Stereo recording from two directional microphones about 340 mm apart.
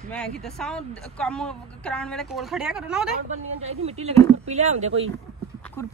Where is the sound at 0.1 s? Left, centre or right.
Centre.